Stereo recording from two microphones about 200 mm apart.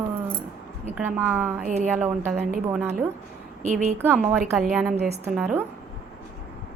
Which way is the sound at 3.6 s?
35° right (ahead or behind).